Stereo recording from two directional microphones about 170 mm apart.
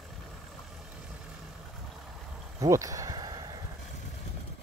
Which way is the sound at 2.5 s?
20° right (ahead or behind).